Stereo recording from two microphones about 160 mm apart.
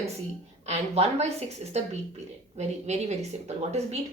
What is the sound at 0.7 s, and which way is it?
A woman's voice, 45° right (ahead or behind).